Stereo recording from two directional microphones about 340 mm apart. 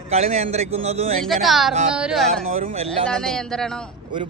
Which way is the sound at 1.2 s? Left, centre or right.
Centre.